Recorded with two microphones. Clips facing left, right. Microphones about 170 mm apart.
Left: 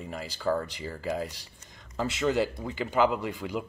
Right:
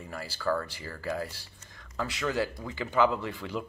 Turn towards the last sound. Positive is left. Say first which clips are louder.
# left 2 dB
turn(degrees=15)  # may be behind; listen again after turning